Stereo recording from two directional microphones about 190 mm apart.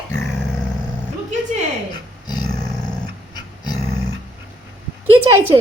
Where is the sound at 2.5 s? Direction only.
5° left (ahead or behind).